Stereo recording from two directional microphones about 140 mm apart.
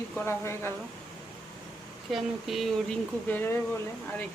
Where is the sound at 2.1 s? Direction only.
Centre (ahead or behind).